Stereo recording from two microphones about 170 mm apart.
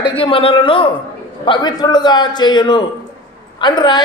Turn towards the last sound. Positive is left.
turn(degrees=25)  # may be behind; listen again after turning